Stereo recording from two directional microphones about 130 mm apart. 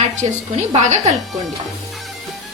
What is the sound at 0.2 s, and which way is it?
Speech, 60° right (ahead or behind).